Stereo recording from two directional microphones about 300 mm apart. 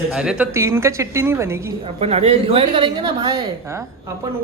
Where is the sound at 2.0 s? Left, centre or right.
Centre.